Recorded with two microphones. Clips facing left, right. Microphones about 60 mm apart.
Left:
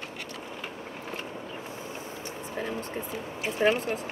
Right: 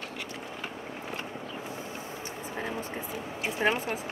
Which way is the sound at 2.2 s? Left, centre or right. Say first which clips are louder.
Left 2 dB; centre.